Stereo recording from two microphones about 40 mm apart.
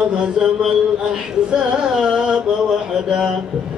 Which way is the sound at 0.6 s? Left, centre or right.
Centre.